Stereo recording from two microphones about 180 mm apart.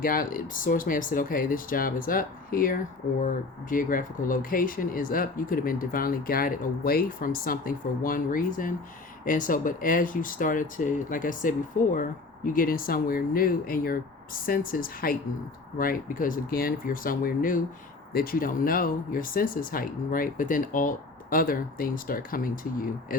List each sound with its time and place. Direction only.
0.0 s speech: 50° left (ahead or behind)